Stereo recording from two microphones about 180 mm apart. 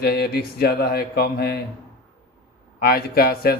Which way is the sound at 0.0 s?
60° left (ahead or behind).